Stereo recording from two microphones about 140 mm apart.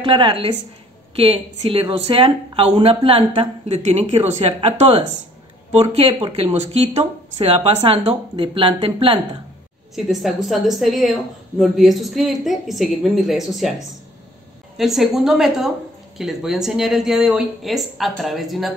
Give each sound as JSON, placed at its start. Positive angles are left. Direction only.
{"t": 0.0, "sound": "speech", "side_deg": -35}
{"t": 9.9, "sound": "a woman's voice", "side_deg": 0}
{"t": 14.8, "sound": "a woman's voice", "side_deg": 0}